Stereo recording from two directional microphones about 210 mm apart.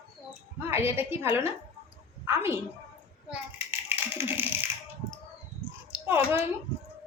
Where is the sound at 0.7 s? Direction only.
10° right (ahead or behind).